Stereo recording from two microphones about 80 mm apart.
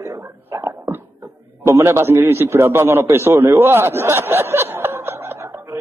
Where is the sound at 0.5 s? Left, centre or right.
Right.